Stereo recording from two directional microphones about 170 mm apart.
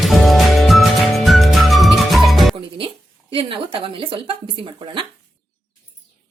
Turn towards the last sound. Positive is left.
turn(degrees=-30)  # may be behind; listen again after turning